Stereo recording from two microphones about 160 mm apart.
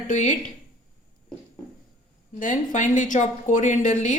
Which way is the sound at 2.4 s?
50° left (ahead or behind).